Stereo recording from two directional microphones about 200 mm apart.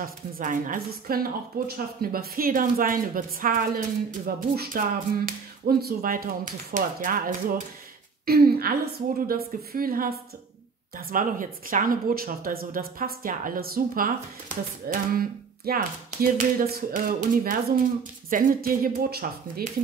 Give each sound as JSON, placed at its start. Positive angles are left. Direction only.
{"t": 0.0, "sound": "speech", "side_deg": -40}